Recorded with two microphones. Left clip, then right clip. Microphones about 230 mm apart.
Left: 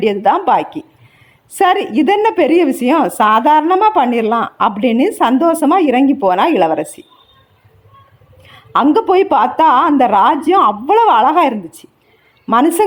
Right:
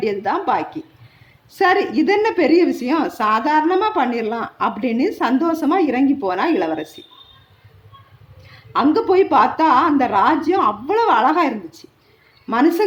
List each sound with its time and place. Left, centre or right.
0.0 s a woman's voice: left
8.4 s a woman's voice: left